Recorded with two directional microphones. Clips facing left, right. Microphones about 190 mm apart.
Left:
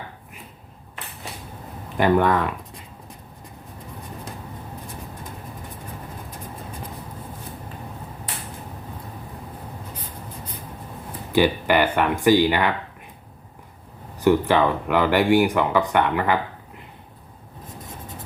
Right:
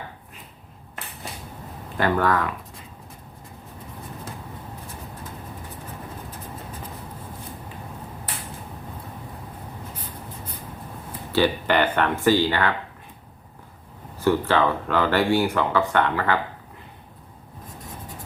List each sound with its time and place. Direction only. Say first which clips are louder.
2.0 s speech: left 3 dB; 20° left (ahead or behind)
11.3 s speech: left 2 dB; 10° left (ahead or behind)
14.3 s speech: left 2 dB; 15° left (ahead or behind)